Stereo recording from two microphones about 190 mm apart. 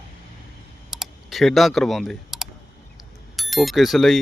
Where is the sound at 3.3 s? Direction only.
Centre (ahead or behind).